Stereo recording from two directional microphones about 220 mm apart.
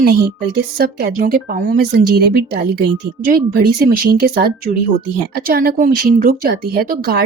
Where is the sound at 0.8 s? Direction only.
45° right (ahead or behind).